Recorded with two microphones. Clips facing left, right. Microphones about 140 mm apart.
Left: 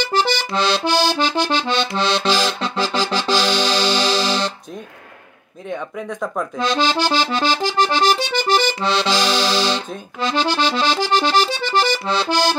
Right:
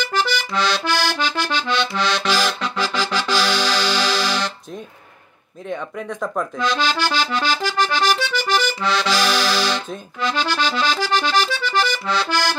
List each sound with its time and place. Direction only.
0.1 s accordion: 30° left (ahead or behind)
2.0 s music: 25° left (ahead or behind)
5.7 s speech: centre (ahead or behind)
6.6 s accordion: 25° left (ahead or behind)